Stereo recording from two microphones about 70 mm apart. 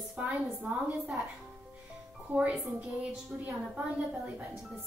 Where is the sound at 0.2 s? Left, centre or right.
Right.